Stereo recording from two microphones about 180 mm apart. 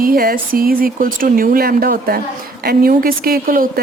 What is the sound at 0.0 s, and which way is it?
Speech, 55° right (ahead or behind).